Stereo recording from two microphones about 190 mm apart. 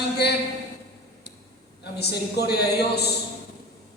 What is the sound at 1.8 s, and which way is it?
A man's voice, 60° left (ahead or behind).